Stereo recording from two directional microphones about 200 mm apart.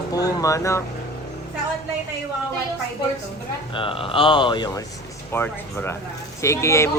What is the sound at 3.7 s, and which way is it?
A man's voice, 25° left (ahead or behind).